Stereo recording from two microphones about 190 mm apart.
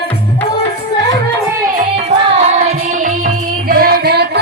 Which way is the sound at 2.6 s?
45° right (ahead or behind).